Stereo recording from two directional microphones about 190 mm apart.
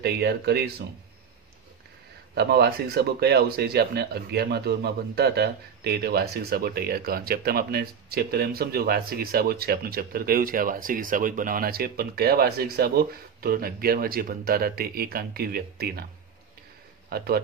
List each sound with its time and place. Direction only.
0.0 s speech: 60° right (ahead or behind)
2.3 s speech: 55° right (ahead or behind)
17.1 s speech: 55° right (ahead or behind)